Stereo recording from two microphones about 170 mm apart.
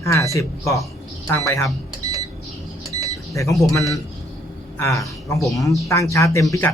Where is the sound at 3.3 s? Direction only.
20° left (ahead or behind).